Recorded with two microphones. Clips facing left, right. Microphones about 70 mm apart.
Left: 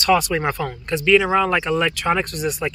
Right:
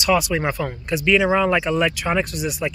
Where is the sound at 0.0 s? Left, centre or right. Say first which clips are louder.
Left 1 dB; centre.